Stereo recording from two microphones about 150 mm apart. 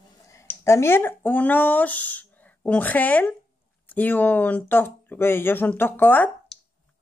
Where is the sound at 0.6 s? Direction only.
15° left (ahead or behind).